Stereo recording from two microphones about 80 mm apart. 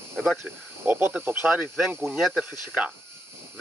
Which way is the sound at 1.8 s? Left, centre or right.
Centre.